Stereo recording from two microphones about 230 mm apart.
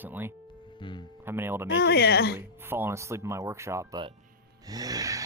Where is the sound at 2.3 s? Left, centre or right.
Centre.